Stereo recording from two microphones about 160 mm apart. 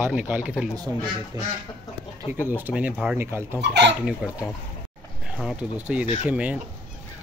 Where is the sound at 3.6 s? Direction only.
90° right.